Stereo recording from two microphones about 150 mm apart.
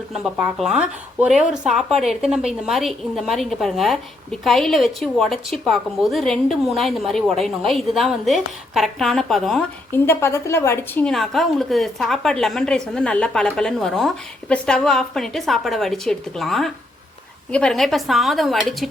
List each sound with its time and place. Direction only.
0.1 s a woman's voice: 10° right (ahead or behind)
9.9 s a woman's voice: 15° left (ahead or behind)
11.0 s a woman's voice: centre (ahead or behind)